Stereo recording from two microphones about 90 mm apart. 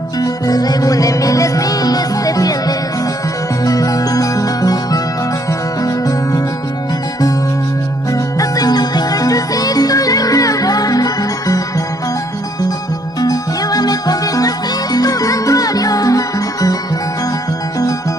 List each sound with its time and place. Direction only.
0.2 s music: 45° left (ahead or behind)
8.1 s music: 45° left (ahead or behind)
13.2 s music: 45° left (ahead or behind)